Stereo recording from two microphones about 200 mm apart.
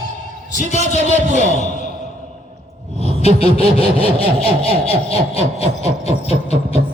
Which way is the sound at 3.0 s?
30° left (ahead or behind).